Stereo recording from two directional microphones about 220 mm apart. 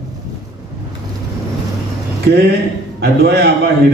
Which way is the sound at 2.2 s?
50° right (ahead or behind).